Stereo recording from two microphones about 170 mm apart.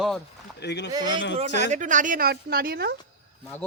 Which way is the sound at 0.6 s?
85° left.